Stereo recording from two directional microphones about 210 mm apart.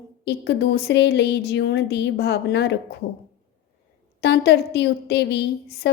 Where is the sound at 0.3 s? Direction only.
55° left (ahead or behind).